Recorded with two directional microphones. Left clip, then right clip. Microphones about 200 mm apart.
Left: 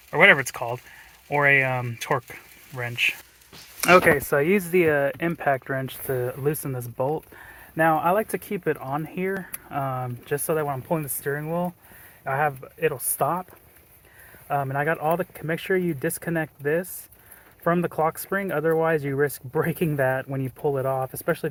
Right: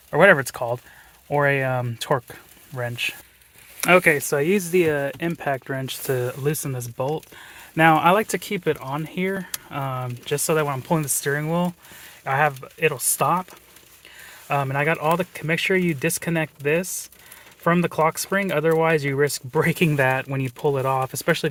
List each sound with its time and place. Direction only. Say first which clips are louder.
0.1 s speech: right 1 dB; 25° right (ahead or behind)
6.1 s speech: right 3 dB; 30° right (ahead or behind)
6.3 s speech: right 1 dB; 20° right (ahead or behind)
7.8 s speech: right 4 dB; 40° right (ahead or behind)
8.3 s speech: right 3 dB; 20° right (ahead or behind)